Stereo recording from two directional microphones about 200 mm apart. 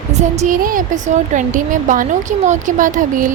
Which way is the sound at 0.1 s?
35° right (ahead or behind).